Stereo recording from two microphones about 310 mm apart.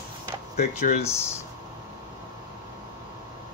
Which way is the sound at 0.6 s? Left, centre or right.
Left.